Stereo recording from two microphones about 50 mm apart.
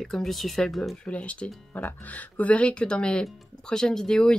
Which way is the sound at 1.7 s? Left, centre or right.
Left.